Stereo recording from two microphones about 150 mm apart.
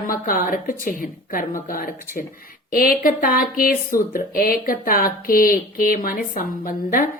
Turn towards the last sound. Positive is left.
turn(degrees=65)  # may be behind; listen again after turning